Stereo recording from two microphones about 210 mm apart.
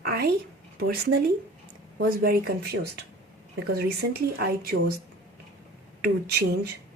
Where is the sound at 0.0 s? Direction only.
45° right (ahead or behind).